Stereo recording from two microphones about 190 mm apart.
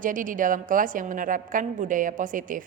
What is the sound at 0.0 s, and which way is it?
A woman's voice, 45° right (ahead or behind).